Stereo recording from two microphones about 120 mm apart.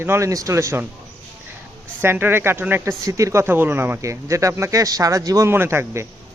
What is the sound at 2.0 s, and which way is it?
Speech, 15° right (ahead or behind).